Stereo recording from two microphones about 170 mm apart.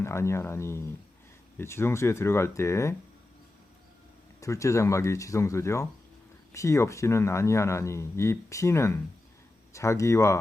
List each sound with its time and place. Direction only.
0.0 s speech: 15° left (ahead or behind)
4.4 s speech: 20° left (ahead or behind)